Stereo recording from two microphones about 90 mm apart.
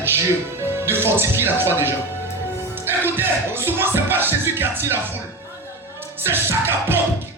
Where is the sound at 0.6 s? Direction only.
25° right (ahead or behind).